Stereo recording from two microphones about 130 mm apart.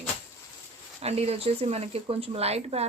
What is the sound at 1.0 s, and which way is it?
Speech, 50° right (ahead or behind).